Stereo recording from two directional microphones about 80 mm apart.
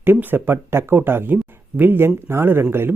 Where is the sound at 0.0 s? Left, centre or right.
Right.